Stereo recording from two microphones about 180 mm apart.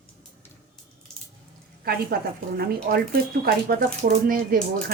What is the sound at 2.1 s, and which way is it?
Speech, 55° right (ahead or behind).